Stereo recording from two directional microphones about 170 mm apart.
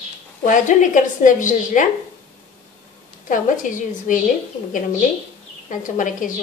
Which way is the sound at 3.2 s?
50° left (ahead or behind).